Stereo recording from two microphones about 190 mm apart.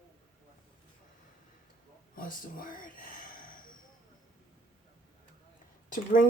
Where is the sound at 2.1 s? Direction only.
50° left (ahead or behind).